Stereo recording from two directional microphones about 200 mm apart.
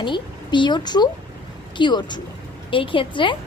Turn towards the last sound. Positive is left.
turn(degrees=25)  # may be behind; listen again after turning